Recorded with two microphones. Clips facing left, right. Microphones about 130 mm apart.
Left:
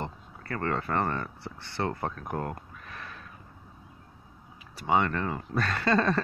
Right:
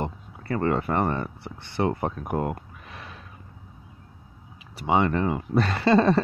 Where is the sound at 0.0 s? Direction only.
20° right (ahead or behind).